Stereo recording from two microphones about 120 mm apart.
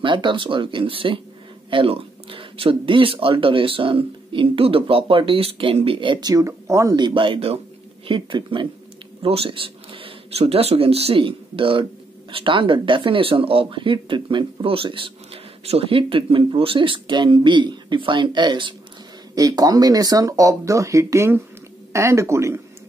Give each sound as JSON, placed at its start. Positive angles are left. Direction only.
{"t": 0.0, "sound": "speech", "side_deg": -40}
{"t": 6.3, "sound": "speech", "side_deg": -25}
{"t": 8.1, "sound": "speech", "side_deg": -45}